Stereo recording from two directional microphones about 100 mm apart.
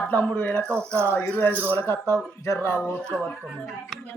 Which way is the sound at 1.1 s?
20° left (ahead or behind).